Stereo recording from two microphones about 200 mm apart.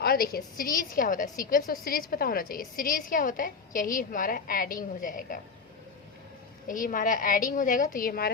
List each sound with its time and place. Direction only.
0.0 s a woman's voice: 50° left (ahead or behind)
6.7 s a woman's voice: 45° left (ahead or behind)